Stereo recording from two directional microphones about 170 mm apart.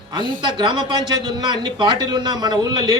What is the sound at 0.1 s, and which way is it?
A man's voice, 30° right (ahead or behind).